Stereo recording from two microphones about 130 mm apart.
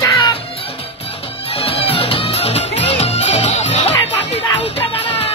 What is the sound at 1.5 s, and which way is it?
Music, 45° left (ahead or behind).